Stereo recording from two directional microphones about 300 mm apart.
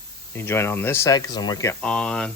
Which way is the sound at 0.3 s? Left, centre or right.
Centre.